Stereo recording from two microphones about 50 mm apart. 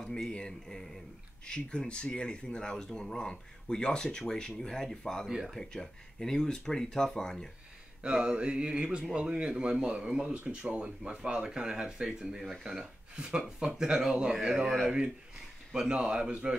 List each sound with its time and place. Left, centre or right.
0.3 s speech: centre
8.0 s a sound: centre
10.5 s speech: right
12.4 s speech: centre
13.1 s speech: centre